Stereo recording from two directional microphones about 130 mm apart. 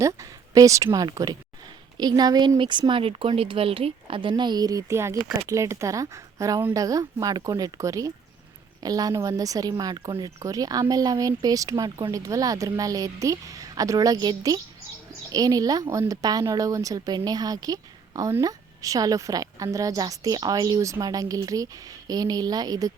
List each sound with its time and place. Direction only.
0.0 s speech: 25° right (ahead or behind)